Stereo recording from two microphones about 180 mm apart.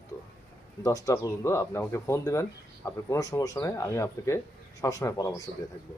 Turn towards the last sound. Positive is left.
turn(degrees=15)  # may be behind; listen again after turning